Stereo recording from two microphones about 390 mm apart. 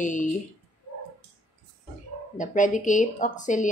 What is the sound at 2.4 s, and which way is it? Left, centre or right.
A woman's voice, centre.